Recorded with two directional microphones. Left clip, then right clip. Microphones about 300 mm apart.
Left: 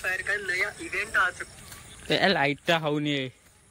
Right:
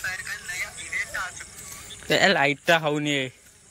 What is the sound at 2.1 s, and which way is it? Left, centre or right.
Speech, centre.